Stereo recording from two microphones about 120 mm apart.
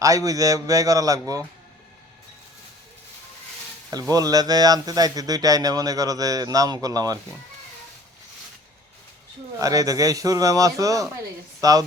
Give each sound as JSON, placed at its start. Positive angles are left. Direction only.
{"t": 0.0, "sound": "a man's voice", "side_deg": -30}
{"t": 4.1, "sound": "a man's voice", "side_deg": -30}
{"t": 9.6, "sound": "a man's voice", "side_deg": -30}